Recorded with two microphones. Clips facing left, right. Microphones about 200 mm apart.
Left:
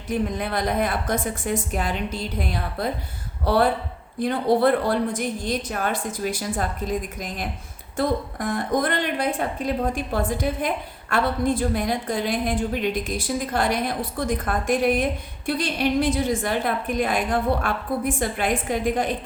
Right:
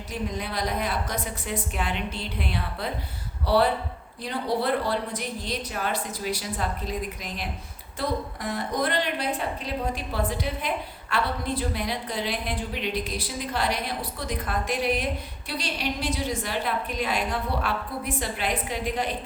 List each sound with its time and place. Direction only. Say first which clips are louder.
0.1 s a woman's voice: left 7 dB; 55° left (ahead or behind)